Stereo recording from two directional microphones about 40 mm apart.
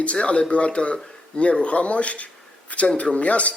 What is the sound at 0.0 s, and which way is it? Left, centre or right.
Speech, left.